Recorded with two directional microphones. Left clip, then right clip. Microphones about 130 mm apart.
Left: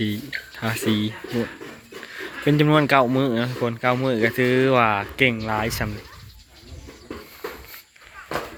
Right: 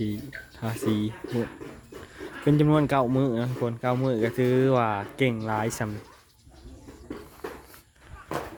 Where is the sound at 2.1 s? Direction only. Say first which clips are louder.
Left 4 dB; 15° right (ahead or behind).